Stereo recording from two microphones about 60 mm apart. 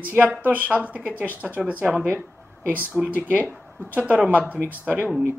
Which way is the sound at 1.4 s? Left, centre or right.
Centre.